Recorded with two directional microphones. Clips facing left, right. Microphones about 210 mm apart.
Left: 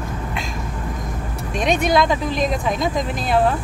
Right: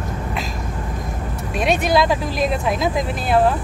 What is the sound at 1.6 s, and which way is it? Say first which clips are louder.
Speech: even; 5° right (ahead or behind).